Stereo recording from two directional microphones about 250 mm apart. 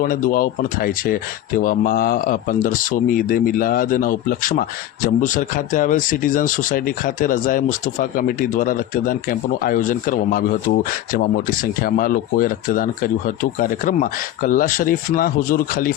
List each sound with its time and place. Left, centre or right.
0.0 s speech: left